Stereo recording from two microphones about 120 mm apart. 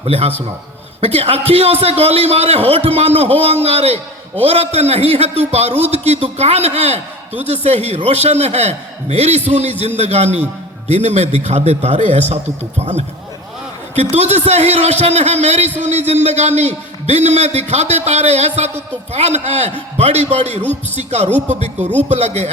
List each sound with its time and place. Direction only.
0.0 s a man's voice: 55° right (ahead or behind)
21.4 s a man's voice: 75° right (ahead or behind)